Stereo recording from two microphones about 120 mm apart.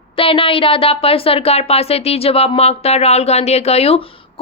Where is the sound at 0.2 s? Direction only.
50° left (ahead or behind).